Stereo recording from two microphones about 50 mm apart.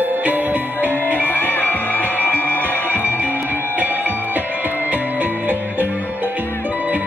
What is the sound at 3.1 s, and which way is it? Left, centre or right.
Music, right.